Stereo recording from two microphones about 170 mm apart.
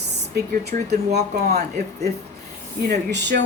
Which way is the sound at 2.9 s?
90° right.